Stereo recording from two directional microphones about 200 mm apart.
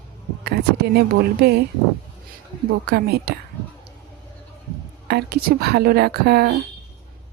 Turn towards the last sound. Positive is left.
turn(degrees=-50)  # may be behind; listen again after turning